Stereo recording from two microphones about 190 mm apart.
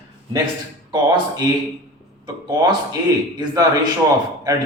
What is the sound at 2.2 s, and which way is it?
Speech, 20° right (ahead or behind).